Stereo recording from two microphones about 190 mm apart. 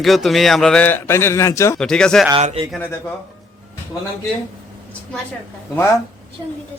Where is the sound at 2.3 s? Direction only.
30° right (ahead or behind).